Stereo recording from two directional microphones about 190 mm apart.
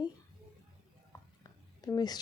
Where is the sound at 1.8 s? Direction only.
20° left (ahead or behind).